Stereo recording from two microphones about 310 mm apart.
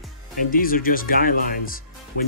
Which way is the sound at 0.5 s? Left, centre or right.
Left.